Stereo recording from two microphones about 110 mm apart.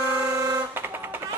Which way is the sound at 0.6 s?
20° right (ahead or behind).